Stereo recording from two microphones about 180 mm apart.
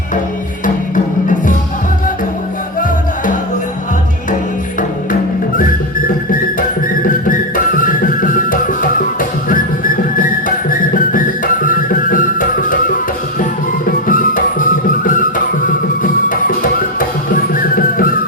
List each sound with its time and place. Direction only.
0.6 s music: 45° left (ahead or behind)
6.6 s music: 50° left (ahead or behind)
9.5 s whistling: 50° left (ahead or behind)
10.7 s music: 50° left (ahead or behind)
13.8 s music: 50° left (ahead or behind)
17.0 s music: 50° left (ahead or behind)